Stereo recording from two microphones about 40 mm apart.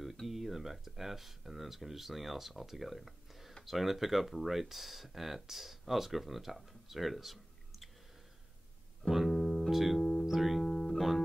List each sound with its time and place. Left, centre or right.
0.3 s speech: centre
9.1 s music: centre
9.7 s speech: centre
10.2 s music: centre
10.6 s music: centre
11.0 s music: centre